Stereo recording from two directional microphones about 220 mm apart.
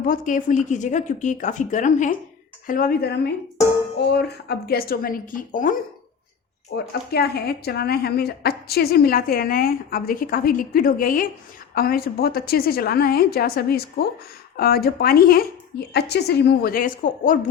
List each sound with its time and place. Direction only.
0.1 s a woman's voice: 35° left (ahead or behind)